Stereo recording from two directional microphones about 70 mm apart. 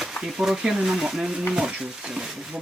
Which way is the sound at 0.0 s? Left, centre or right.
Centre.